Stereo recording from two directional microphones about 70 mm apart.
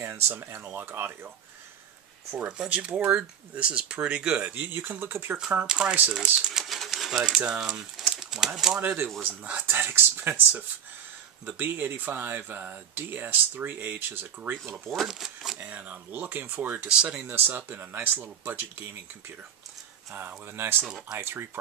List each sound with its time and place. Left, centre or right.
0.3 s speech: right
2.3 s speech: centre; by 5.4 s right
5.7 s speech: centre
6.6 s speech: centre
8.8 s speech: right
14.9 s speech: centre
15.6 s speech: right
20.8 s speech: centre
21.2 s speech: right